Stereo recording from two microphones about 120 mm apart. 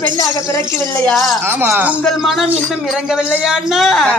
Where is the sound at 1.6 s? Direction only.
15° right (ahead or behind).